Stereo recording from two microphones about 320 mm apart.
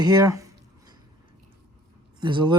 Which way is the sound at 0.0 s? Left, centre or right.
Centre.